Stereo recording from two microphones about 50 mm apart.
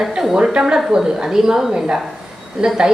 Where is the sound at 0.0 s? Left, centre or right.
Centre.